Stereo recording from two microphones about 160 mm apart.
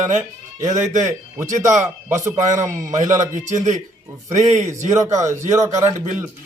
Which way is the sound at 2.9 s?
50° right (ahead or behind).